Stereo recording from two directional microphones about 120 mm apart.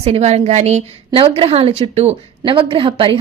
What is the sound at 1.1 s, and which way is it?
Speech, 50° right (ahead or behind).